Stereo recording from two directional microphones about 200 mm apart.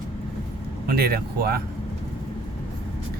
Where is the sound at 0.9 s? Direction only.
50° right (ahead or behind).